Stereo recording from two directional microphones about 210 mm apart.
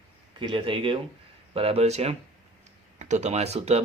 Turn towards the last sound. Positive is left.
turn(degrees=-30)  # may be behind; listen again after turning